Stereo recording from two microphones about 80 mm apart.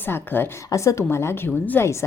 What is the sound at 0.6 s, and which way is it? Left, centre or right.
A woman's voice, left.